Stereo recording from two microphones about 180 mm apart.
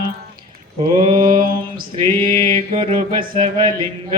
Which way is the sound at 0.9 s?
25° right (ahead or behind).